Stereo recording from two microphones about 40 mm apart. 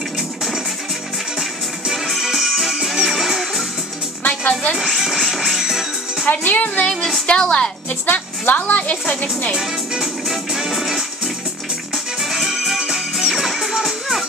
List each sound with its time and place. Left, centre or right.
1.9 s music: centre
4.2 s music: left
4.9 s music: centre
6.2 s a woman's voice: left
7.2 s a woman's voice: left
8.1 s a woman's voice: left
10.7 s music: centre
12.2 s music: centre
13.2 s music: centre